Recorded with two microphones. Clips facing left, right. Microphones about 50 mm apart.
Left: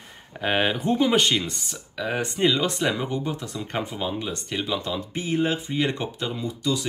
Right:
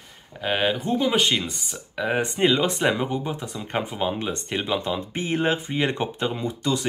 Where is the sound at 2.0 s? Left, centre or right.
Centre.